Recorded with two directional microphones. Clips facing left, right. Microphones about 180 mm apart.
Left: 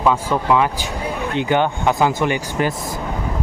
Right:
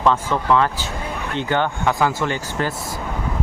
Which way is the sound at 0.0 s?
10° left (ahead or behind).